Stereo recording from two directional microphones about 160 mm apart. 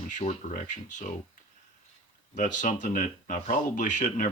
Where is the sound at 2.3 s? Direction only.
50° left (ahead or behind).